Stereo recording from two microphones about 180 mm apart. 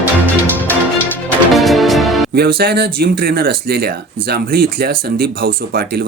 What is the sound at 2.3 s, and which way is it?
Speech, 60° right (ahead or behind).